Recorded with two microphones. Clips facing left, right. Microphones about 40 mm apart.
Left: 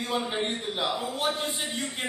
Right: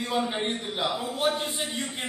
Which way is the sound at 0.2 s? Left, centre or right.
Centre.